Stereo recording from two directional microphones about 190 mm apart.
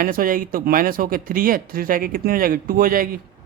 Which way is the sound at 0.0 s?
45° right (ahead or behind).